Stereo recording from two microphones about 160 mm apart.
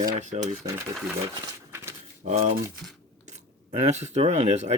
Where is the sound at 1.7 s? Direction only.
15° right (ahead or behind).